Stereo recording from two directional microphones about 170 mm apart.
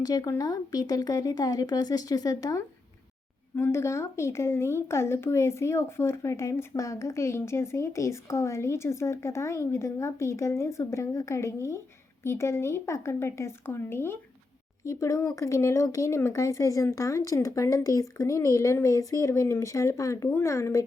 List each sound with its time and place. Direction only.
0.0 s speech: 20° left (ahead or behind)